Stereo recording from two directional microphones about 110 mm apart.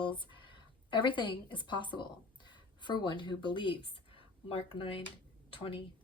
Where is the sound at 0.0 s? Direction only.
50° left (ahead or behind).